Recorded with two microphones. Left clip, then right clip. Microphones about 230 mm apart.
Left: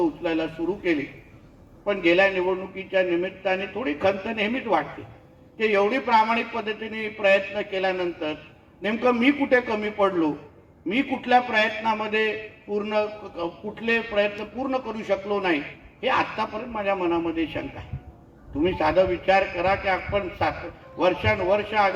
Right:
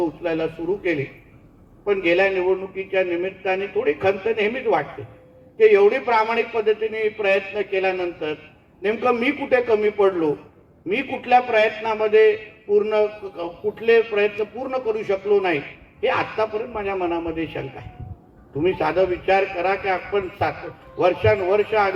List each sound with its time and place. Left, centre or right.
0.2 s a man's voice: left
18.6 s a man's voice: left